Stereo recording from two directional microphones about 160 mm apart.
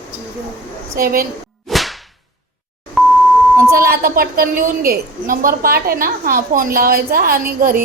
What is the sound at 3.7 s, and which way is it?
A woman's voice, 65° right (ahead or behind).